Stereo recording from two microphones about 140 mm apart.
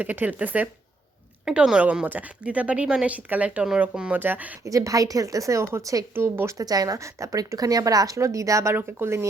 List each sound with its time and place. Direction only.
0.0 s speech: 10° right (ahead or behind)
4.6 s a woman's voice: 25° right (ahead or behind)